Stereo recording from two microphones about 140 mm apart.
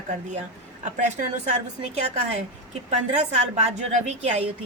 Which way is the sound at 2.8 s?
55° right (ahead or behind).